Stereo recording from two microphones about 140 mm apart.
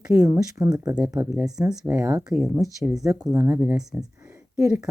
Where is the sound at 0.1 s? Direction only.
20° right (ahead or behind).